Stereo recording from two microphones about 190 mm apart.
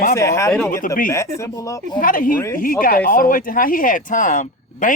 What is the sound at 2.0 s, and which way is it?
Speech, 45° left (ahead or behind).